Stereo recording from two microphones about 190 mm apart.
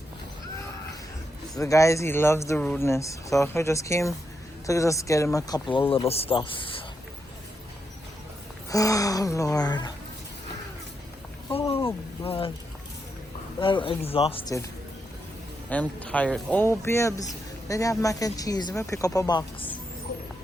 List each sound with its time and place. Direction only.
1.5 s speech: 15° left (ahead or behind)
8.7 s speech: 15° left (ahead or behind)
11.4 s a sound: 30° left (ahead or behind)
12.2 s speech: 30° left (ahead or behind)
13.6 s speech: 25° left (ahead or behind)
15.7 s speech: 5° left (ahead or behind)